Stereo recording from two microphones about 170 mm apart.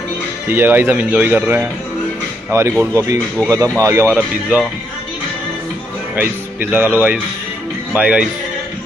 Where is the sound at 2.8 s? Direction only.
20° right (ahead or behind).